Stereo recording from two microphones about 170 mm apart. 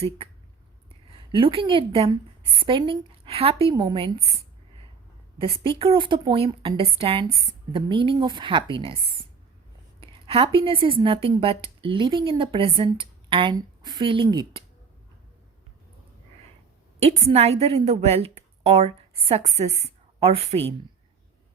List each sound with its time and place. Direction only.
1.3 s a woman's voice: 30° right (ahead or behind)
5.4 s a woman's voice: 35° right (ahead or behind)
17.0 s a woman's voice: 35° right (ahead or behind)